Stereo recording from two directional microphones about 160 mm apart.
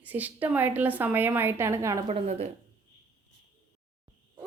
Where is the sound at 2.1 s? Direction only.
40° right (ahead or behind).